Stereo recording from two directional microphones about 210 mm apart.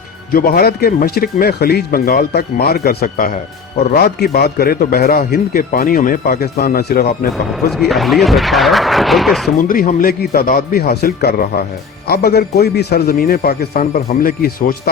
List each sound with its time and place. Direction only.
0.3 s a man's voice: 45° left (ahead or behind)
7.8 s speech: centre (ahead or behind)
9.6 s a man's voice: 45° left (ahead or behind)